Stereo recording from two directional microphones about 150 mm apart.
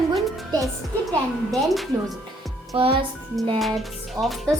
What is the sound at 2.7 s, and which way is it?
Speech, 40° right (ahead or behind).